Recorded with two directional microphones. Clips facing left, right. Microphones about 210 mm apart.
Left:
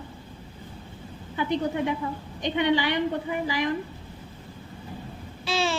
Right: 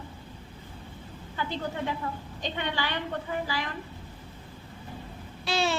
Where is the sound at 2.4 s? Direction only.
15° left (ahead or behind).